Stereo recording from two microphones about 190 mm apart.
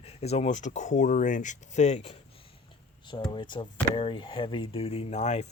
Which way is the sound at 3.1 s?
25° left (ahead or behind).